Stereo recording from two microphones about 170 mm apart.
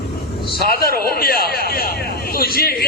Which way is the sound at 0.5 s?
60° left (ahead or behind).